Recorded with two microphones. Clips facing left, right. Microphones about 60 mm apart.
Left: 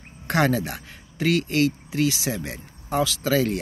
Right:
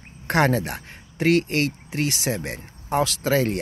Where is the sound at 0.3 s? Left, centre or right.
Right.